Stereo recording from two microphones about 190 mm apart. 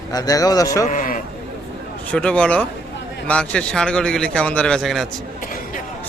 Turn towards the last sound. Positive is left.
turn(degrees=45)  # may be behind; listen again after turning